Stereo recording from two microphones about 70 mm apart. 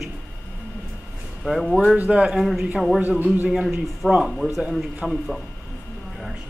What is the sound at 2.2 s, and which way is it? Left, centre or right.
A man's voice, centre.